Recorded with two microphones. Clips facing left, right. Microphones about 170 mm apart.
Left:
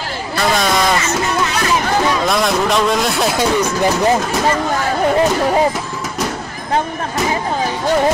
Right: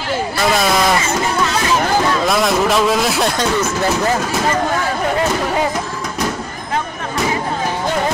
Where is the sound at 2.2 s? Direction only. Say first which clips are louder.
Right 1 dB; centre (ahead or behind); by 4.1 s 15° left (ahead or behind).